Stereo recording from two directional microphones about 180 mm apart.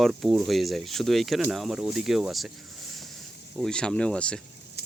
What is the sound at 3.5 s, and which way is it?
Speech, 5° left (ahead or behind).